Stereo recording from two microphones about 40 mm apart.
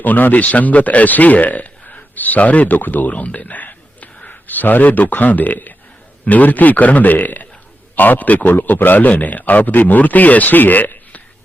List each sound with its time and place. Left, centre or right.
0.0 s speech: left